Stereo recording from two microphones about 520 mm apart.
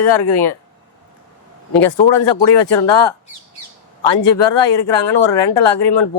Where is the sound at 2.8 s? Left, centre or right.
Left.